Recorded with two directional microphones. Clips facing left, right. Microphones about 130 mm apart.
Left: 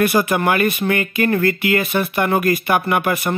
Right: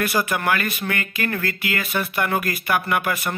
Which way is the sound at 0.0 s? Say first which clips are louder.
Left 6 dB; 25° left (ahead or behind).